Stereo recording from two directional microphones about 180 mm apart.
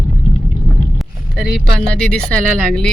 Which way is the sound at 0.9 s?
Centre (ahead or behind).